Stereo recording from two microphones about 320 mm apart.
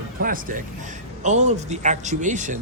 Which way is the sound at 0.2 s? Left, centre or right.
Right.